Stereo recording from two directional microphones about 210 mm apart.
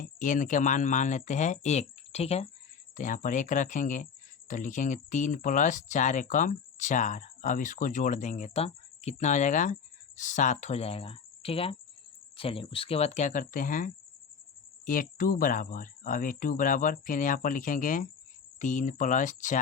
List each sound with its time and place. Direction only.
0.0 s speech: 40° left (ahead or behind)